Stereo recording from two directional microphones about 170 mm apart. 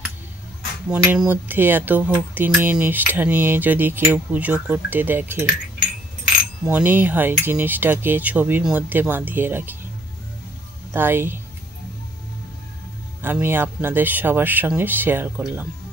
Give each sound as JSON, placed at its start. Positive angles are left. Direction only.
{"t": 0.8, "sound": "speech", "side_deg": -5}
{"t": 6.7, "sound": "speech", "side_deg": -10}
{"t": 10.9, "sound": "speech", "side_deg": -10}
{"t": 13.2, "sound": "speech", "side_deg": -10}